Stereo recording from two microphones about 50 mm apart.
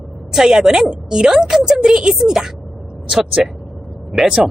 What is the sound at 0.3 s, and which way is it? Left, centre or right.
A woman's voice, centre.